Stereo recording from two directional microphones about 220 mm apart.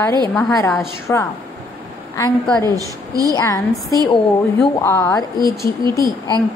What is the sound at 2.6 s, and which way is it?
Speech, 15° right (ahead or behind).